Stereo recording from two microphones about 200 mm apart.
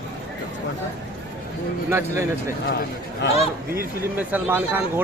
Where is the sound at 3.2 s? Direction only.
65° left (ahead or behind).